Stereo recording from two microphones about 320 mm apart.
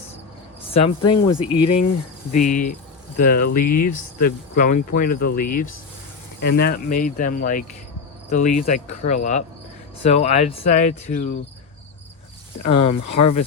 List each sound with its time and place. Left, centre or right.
0.7 s speech: centre
8.4 s speech: left
8.9 s speech: left
12.6 s speech: left